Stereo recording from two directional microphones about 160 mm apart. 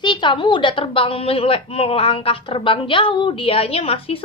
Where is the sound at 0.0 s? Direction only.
30° left (ahead or behind).